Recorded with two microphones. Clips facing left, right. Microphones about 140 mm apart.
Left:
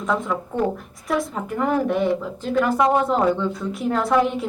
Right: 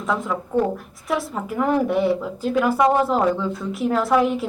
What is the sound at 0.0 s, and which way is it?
Speech, centre (ahead or behind).